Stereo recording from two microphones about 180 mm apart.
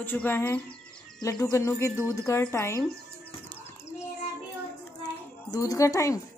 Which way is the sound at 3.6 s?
15° left (ahead or behind).